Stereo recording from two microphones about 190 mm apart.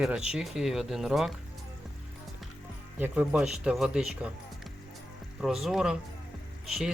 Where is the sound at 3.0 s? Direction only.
5° right (ahead or behind).